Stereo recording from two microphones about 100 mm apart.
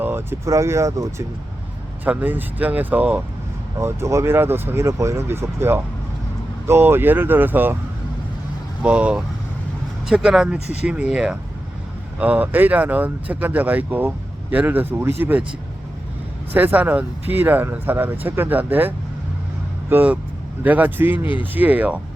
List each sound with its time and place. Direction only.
0.0 s speech: 25° right (ahead or behind)
2.0 s speech: 20° right (ahead or behind)
3.8 s speech: 30° right (ahead or behind)
8.8 s speech: 10° right (ahead or behind)
16.5 s speech: 20° right (ahead or behind)